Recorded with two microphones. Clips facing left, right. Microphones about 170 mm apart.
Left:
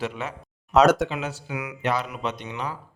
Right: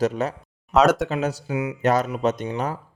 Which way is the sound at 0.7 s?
Centre (ahead or behind).